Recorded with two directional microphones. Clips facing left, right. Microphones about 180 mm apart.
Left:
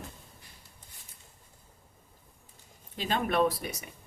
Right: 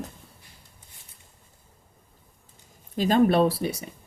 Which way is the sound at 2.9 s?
40° right (ahead or behind).